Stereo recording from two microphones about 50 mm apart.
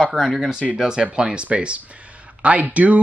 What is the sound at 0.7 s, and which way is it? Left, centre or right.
Speech, centre.